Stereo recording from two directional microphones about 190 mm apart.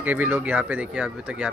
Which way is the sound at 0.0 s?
10° right (ahead or behind).